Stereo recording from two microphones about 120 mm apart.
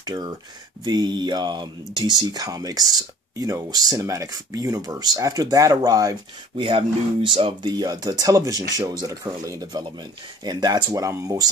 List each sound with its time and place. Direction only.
0.0 s speech: 35° right (ahead or behind)
6.5 s speech: 45° right (ahead or behind); by 11.4 s 25° right (ahead or behind)